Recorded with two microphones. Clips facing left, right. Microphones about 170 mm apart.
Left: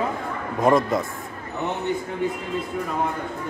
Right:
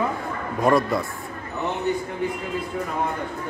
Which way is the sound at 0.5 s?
20° left (ahead or behind).